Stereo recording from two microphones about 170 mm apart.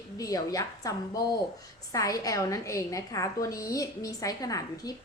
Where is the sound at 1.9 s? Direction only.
20° left (ahead or behind).